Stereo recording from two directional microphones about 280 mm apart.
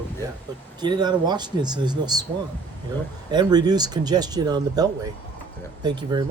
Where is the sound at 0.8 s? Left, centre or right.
Centre.